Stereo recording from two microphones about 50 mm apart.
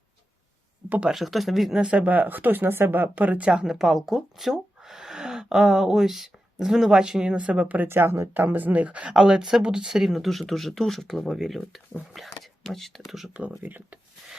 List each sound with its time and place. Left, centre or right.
1.1 s speech: centre
1.7 s speech: right
3.2 s speech: right
3.7 s speech: centre; by 7.9 s right
7.9 s speech: right
8.3 s speech: right
9.0 s speech: centre
13.6 s speech: right